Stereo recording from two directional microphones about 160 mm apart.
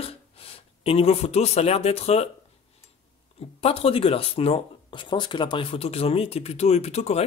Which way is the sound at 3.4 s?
40° left (ahead or behind).